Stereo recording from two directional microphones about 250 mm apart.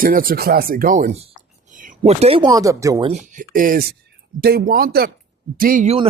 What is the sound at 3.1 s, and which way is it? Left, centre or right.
Speech, right.